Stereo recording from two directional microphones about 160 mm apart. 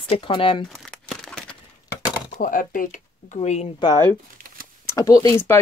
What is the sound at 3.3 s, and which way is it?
Speech, 45° left (ahead or behind).